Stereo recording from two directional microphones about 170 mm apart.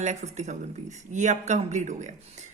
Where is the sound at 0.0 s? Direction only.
40° right (ahead or behind).